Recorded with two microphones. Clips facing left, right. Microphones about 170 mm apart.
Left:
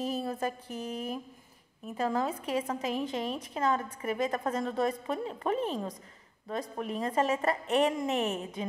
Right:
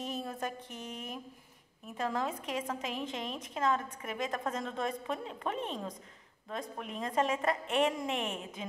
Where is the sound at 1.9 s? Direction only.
Centre (ahead or behind).